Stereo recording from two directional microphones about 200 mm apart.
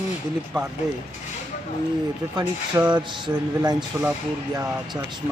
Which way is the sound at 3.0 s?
25° right (ahead or behind).